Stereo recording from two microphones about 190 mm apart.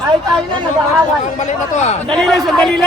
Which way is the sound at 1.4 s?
35° left (ahead or behind).